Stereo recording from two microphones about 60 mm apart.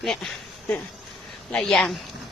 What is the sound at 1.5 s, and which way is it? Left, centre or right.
Speech, centre.